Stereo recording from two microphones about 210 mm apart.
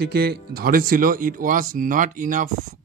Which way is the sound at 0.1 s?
50° right (ahead or behind).